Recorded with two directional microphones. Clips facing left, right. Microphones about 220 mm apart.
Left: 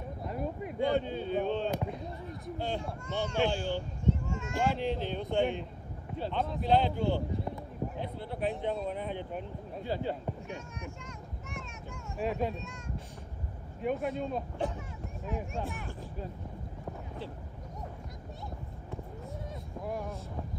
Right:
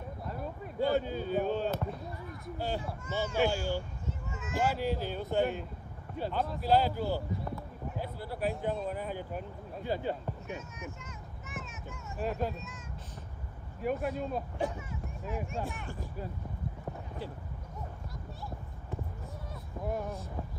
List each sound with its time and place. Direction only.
0.2 s a sound: 20° left (ahead or behind)
0.7 s speech: 5° right (ahead or behind)
1.7 s basketball bounce: 15° left (ahead or behind)
2.4 s speech: 5° right (ahead or behind)
10.5 s a sound: 5° right (ahead or behind)
13.7 s speech: centre (ahead or behind)